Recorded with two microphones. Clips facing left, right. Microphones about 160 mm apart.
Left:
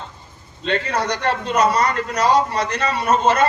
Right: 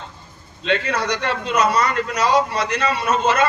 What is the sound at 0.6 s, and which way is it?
A man's voice, 45° left (ahead or behind).